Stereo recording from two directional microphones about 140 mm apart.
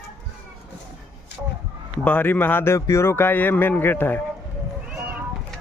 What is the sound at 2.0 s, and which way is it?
A man's voice, 10° left (ahead or behind).